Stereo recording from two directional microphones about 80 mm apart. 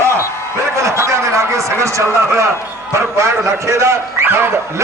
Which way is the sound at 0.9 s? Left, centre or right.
Right.